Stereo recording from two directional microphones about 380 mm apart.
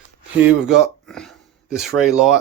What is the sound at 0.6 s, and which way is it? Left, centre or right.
Speech, centre.